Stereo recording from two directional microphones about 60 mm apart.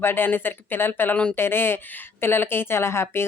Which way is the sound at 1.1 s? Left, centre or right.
Centre.